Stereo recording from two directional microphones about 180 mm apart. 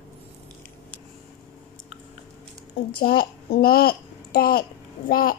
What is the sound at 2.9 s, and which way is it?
A child's voice, 60° left (ahead or behind).